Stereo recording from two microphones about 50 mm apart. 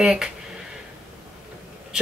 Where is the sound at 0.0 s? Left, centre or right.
Centre.